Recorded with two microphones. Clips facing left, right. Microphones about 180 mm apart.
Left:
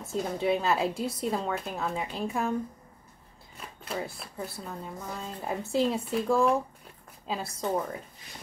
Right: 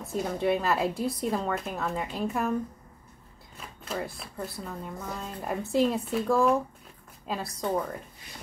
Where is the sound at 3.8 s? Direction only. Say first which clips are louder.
Right 1 dB; centre (ahead or behind).